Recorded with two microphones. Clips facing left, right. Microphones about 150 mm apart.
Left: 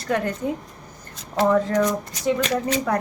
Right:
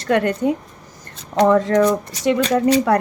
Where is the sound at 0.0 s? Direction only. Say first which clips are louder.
Right 6 dB; 70° right (ahead or behind).